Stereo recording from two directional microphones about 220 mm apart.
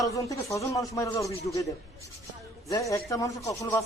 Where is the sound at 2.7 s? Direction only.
15° left (ahead or behind).